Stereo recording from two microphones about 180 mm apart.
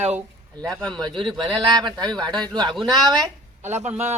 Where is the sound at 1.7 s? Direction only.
25° right (ahead or behind).